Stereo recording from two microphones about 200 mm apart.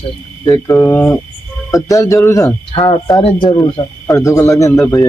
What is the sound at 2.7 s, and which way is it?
Speech, 25° left (ahead or behind).